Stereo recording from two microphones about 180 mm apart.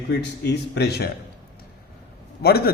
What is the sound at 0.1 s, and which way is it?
A man's voice, 70° left (ahead or behind).